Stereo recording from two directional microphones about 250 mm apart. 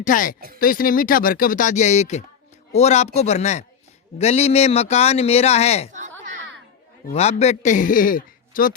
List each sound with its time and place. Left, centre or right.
0.0 s speech: left
5.9 s a sound: right
7.1 s speech: left